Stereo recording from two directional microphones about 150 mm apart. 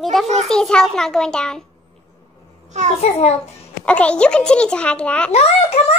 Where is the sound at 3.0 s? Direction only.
45° left (ahead or behind).